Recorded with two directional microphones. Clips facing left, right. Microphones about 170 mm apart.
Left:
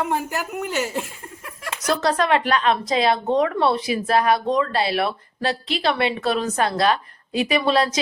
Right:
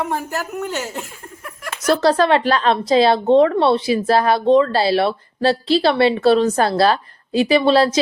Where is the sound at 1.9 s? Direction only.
30° right (ahead or behind).